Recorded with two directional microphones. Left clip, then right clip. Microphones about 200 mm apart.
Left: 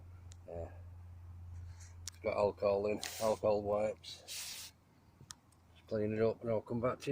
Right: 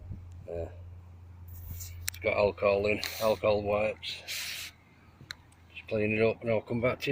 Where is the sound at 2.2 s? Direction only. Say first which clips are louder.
Right 7 dB; 5° left (ahead or behind).